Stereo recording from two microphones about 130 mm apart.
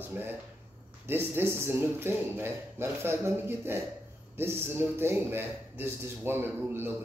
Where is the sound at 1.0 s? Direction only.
15° right (ahead or behind).